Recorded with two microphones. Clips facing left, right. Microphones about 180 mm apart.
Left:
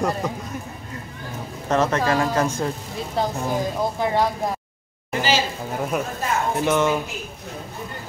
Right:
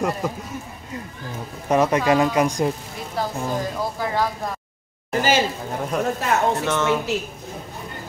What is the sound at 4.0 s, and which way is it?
Speech, 20° left (ahead or behind).